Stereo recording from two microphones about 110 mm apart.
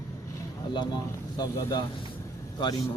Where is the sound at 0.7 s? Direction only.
45° left (ahead or behind).